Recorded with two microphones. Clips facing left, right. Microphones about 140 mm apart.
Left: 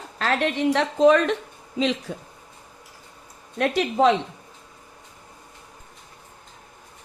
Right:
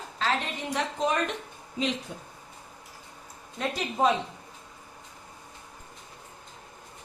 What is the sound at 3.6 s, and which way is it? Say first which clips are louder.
Speech: left 7 dB; 75° left (ahead or behind).